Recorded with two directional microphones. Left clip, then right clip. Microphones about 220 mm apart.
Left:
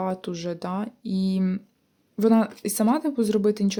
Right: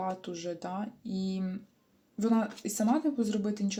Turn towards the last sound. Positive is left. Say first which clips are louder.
# left 11 dB
turn(degrees=45)  # may be behind; listen again after turning